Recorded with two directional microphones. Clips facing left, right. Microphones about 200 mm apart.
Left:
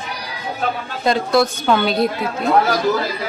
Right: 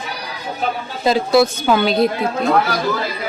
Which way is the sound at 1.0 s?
5° right (ahead or behind).